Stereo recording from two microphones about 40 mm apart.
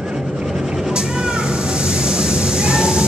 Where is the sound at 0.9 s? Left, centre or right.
Right.